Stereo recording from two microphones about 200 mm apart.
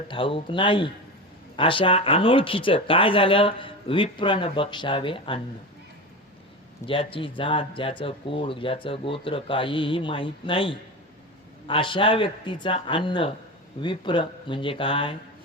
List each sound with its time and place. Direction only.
0.1 s speech: 25° left (ahead or behind)
6.8 s speech: 25° left (ahead or behind)